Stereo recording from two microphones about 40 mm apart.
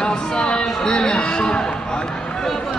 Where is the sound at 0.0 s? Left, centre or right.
Centre.